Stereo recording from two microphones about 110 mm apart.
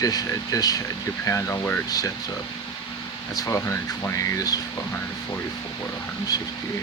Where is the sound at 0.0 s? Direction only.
35° left (ahead or behind).